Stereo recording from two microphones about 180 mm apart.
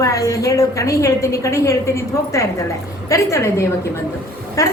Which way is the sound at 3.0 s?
15° left (ahead or behind).